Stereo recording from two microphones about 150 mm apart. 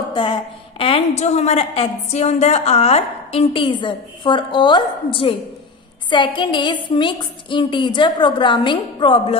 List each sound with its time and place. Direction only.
0.1 s a woman's voice: 35° left (ahead or behind)